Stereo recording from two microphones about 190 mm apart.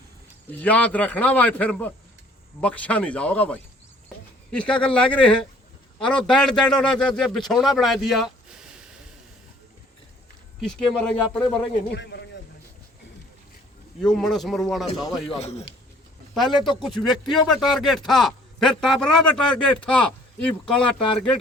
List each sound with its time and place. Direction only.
0.4 s a man's voice: 10° left (ahead or behind)
10.6 s speech: 5° left (ahead or behind)
11.9 s a man's voice: 60° left (ahead or behind)
14.0 s speech: 5° left (ahead or behind)
15.3 s a man's voice: 35° left (ahead or behind)
16.3 s speech: centre (ahead or behind)